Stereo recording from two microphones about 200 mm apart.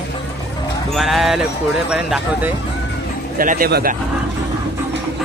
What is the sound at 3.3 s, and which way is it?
Speech, 45° right (ahead or behind).